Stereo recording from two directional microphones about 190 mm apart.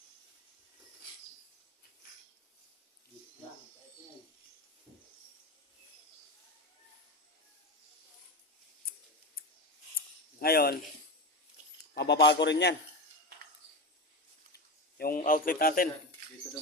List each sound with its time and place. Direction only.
10.4 s speech: 55° left (ahead or behind)
11.9 s a man's voice: 60° left (ahead or behind)
14.9 s a man's voice: 50° left (ahead or behind)